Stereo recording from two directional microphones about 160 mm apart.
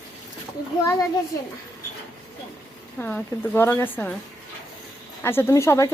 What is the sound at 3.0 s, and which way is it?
A woman's voice, 10° left (ahead or behind).